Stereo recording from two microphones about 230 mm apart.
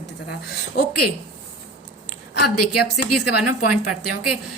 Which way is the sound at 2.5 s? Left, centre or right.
Left.